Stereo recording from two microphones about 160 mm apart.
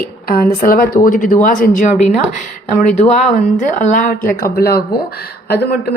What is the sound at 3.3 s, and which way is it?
A woman's voice, 50° left (ahead or behind).